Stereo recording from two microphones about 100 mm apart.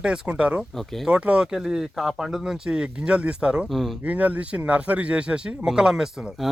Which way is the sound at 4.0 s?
15° right (ahead or behind).